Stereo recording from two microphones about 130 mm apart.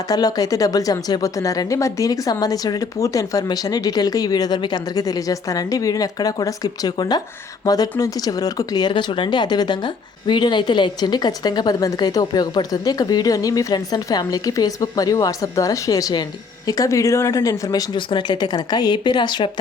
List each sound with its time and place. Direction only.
0.1 s speech: 30° left (ahead or behind)